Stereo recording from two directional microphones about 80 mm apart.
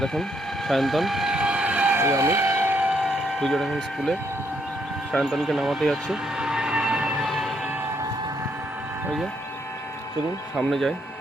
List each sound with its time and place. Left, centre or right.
0.0 s speech: centre
0.7 s vehicle: centre
2.0 s train: right
2.9 s speech: centre
5.2 s vehicle: centre
7.3 s train: centre
10.7 s speech: centre